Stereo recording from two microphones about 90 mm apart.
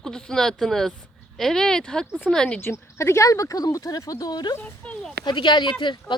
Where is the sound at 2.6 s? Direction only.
30° left (ahead or behind).